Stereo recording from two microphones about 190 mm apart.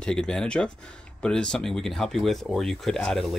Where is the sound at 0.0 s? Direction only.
5° left (ahead or behind).